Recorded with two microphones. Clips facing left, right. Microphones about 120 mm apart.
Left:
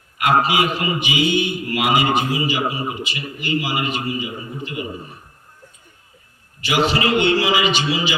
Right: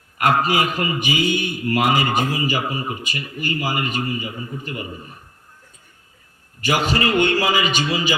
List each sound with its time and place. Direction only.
0.4 s a man's voice: 45° right (ahead or behind)
6.6 s a man's voice: 45° right (ahead or behind)